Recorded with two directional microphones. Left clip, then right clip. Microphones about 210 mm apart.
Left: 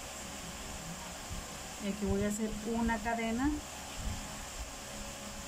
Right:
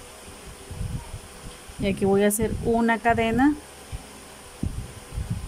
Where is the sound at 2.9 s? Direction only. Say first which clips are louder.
Right 12 dB; 50° right (ahead or behind).